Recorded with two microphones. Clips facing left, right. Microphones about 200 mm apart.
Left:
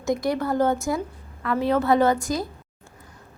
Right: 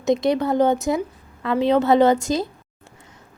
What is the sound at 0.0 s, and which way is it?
A woman's voice, 20° right (ahead or behind).